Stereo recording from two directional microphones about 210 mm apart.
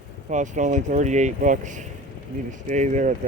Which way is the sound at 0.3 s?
35° right (ahead or behind).